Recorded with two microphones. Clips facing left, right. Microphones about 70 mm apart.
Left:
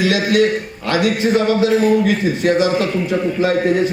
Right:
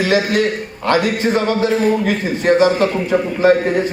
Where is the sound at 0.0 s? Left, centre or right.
Right.